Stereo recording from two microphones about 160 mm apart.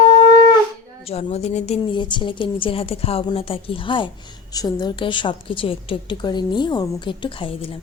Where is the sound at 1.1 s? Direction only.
40° left (ahead or behind).